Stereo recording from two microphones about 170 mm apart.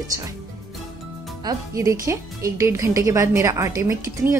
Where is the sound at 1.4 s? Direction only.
20° right (ahead or behind).